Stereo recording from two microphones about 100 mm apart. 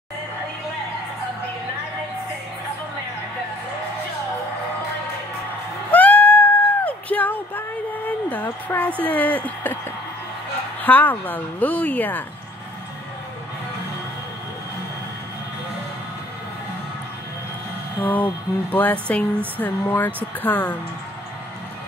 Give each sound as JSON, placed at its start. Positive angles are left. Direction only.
{"t": 5.9, "sound": "music", "side_deg": 15}
{"t": 8.3, "sound": "a sound", "side_deg": 15}
{"t": 9.0, "sound": "speech", "side_deg": 15}
{"t": 10.8, "sound": "speech", "side_deg": 15}
{"t": 18.0, "sound": "speech", "side_deg": 20}